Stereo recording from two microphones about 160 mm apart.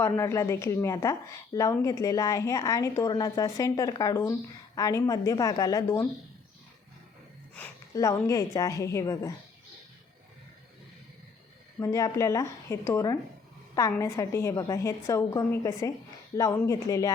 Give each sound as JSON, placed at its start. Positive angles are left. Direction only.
{"t": 0.0, "sound": "a woman's voice", "side_deg": 15}
{"t": 7.9, "sound": "a woman's voice", "side_deg": 20}
{"t": 11.8, "sound": "a woman's voice", "side_deg": 20}